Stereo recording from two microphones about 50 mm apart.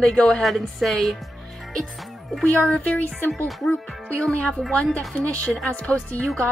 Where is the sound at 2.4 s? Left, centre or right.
Left.